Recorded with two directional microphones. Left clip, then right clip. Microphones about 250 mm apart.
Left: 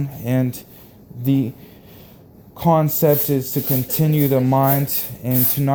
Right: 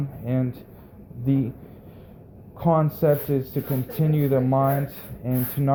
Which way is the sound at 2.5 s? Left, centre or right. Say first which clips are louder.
Left 5 dB; left.